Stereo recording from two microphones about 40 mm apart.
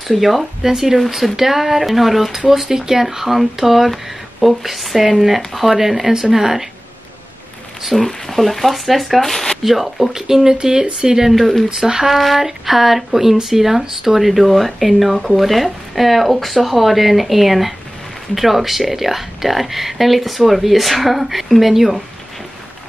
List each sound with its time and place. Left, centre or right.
0.1 s speech: centre
7.9 s speech: centre
11.3 s speech: centre
11.8 s speech: centre
12.1 s speech: centre